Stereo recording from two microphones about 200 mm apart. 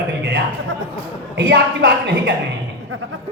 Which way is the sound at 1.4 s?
55° right (ahead or behind).